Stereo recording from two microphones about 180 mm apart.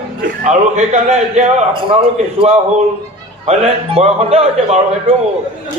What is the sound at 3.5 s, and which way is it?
A man's voice, 35° right (ahead or behind).